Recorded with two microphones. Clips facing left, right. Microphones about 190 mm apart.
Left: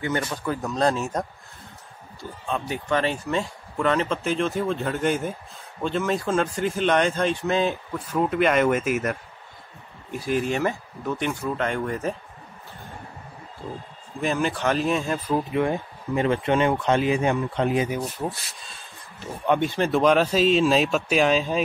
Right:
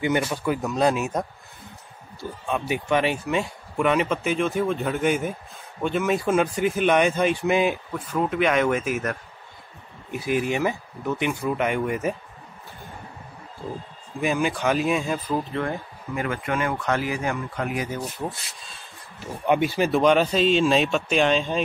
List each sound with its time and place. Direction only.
0.2 s speech: 10° right (ahead or behind)
7.9 s speech: centre (ahead or behind)
10.3 s speech: 10° right (ahead or behind)
14.2 s speech: 10° right (ahead or behind)
15.2 s speech: 10° left (ahead or behind)
18.2 s speech: 10° left (ahead or behind)
19.4 s speech: 10° right (ahead or behind)